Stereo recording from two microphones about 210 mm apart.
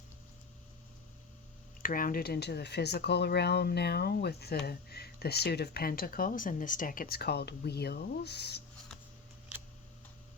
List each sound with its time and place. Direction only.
1.8 s speech: 40° left (ahead or behind)